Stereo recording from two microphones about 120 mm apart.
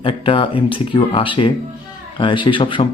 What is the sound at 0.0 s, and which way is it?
Speech, 45° left (ahead or behind).